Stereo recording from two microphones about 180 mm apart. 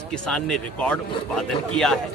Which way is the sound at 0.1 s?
5° left (ahead or behind).